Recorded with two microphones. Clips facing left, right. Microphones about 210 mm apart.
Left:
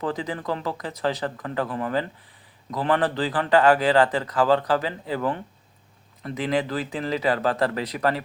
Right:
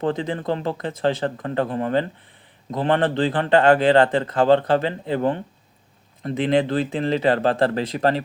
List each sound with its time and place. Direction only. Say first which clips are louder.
0.0 s speech: right 4 dB; 25° right (ahead or behind)